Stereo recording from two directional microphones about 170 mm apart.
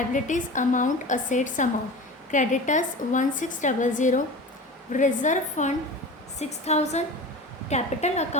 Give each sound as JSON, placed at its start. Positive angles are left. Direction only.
{"t": 0.1, "sound": "a woman's voice", "side_deg": 50}